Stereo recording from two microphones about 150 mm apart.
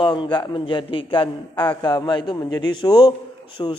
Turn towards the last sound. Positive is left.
turn(degrees=25)  # may be behind; listen again after turning